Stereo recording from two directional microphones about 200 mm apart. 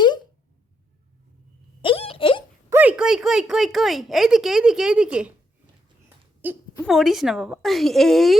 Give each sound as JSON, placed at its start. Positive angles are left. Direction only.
{"t": 1.8, "sound": "a sound", "side_deg": 25}
{"t": 2.6, "sound": "a woman's voice", "side_deg": -10}
{"t": 6.4, "sound": "a woman's voice", "side_deg": -5}